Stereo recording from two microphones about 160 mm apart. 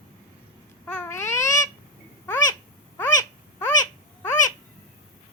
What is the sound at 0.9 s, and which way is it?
Babbling, 15° left (ahead or behind).